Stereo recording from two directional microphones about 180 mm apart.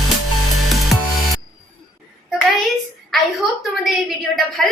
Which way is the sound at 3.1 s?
Centre (ahead or behind).